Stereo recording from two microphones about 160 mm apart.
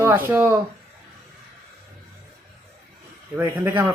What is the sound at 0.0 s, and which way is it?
Speech, 15° right (ahead or behind).